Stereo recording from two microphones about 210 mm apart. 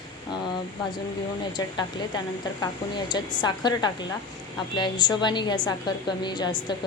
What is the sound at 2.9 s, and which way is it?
A woman's voice, 20° left (ahead or behind).